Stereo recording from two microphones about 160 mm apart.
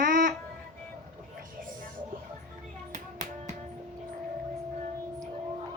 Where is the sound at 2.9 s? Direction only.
45° right (ahead or behind).